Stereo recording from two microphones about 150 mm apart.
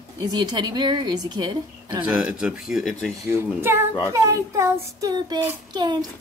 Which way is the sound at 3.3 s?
15° right (ahead or behind).